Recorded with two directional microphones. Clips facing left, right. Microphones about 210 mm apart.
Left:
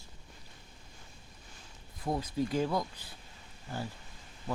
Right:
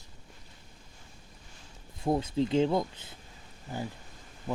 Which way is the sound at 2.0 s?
25° right (ahead or behind).